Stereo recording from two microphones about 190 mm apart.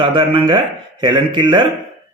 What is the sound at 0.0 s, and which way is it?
A man's voice, 25° right (ahead or behind).